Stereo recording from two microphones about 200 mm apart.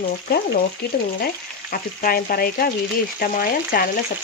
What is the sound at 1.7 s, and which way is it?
Frying, 45° left (ahead or behind).